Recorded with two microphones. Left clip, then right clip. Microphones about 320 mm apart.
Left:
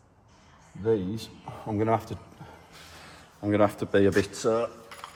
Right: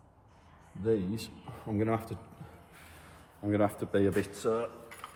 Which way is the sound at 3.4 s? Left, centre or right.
Left.